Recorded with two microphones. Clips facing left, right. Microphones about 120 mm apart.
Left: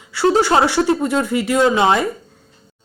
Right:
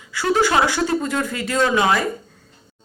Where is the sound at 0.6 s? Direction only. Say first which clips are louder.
Left 4 dB; 20° left (ahead or behind).